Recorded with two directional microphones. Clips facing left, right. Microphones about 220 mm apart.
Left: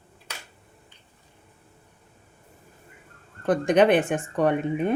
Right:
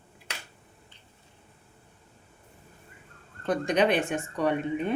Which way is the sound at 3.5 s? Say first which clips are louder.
Left 5 dB; 55° left (ahead or behind).